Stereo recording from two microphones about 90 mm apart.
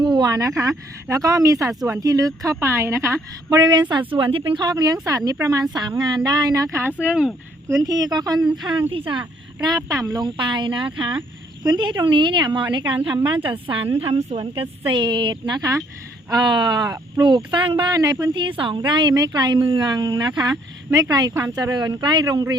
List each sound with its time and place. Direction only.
0.0 s speech: 50° right (ahead or behind); by 3.6 s 35° right (ahead or behind)
3.6 s a woman's voice: 55° right (ahead or behind)
4.1 s a woman's voice: 80° right
4.6 s a woman's voice: 45° right (ahead or behind)
5.7 s a woman's voice: 50° right (ahead or behind); by 6.9 s 30° right (ahead or behind)
7.0 s speech: 15° right (ahead or behind)
7.8 s a woman's voice: 45° right (ahead or behind)
8.9 s speech: 75° right (ahead or behind)
9.6 s speech: 40° right (ahead or behind)
10.2 s a woman's voice: 65° right (ahead or behind)
14.0 s speech: 90° right; by 17.9 s 65° right (ahead or behind)
17.9 s a woman's voice: 45° right (ahead or behind)
18.3 s a woman's voice: 65° right (ahead or behind); by 22.5 s 40° right (ahead or behind)